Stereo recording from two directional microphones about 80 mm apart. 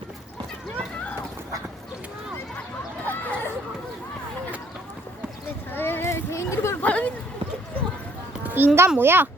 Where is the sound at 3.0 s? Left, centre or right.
Left.